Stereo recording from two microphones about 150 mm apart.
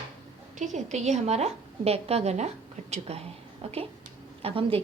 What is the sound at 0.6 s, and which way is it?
A woman's voice, 55° right (ahead or behind).